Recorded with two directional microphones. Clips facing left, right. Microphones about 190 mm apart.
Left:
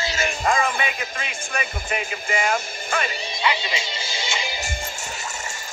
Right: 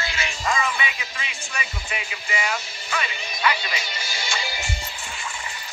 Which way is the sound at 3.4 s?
20° left (ahead or behind).